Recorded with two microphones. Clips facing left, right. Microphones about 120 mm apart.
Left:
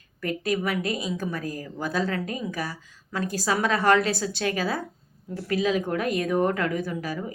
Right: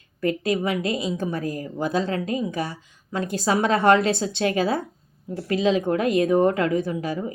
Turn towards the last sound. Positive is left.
turn(degrees=-25)  # may be behind; listen again after turning